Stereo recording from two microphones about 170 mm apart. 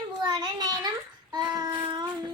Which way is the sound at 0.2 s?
25° right (ahead or behind).